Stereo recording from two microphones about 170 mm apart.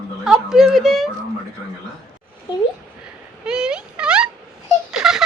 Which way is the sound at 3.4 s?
5° right (ahead or behind).